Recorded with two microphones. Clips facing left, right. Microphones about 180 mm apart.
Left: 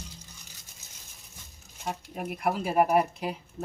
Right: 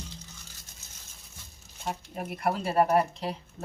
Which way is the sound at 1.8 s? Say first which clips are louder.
Even; centre (ahead or behind).